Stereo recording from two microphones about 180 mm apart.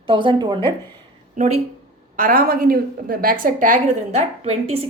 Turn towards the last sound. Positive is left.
turn(degrees=-35)  # may be behind; listen again after turning